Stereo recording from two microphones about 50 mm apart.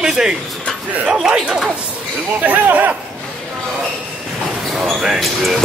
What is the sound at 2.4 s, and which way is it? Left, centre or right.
Speech, right.